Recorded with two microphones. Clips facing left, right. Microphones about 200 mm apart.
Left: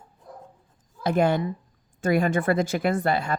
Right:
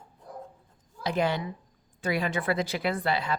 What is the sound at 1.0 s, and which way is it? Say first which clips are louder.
Speech: left 6 dB; 50° left (ahead or behind).